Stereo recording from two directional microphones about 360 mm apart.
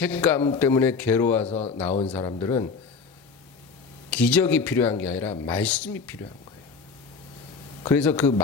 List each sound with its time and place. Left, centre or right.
0.0 s a man's voice: centre
1.5 s speech: centre
4.2 s a man's voice: centre
7.9 s a man's voice: centre